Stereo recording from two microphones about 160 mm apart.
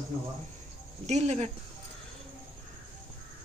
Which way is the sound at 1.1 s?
45° right (ahead or behind).